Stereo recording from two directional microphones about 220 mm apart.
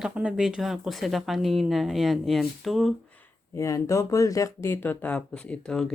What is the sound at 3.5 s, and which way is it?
Speech, 15° left (ahead or behind).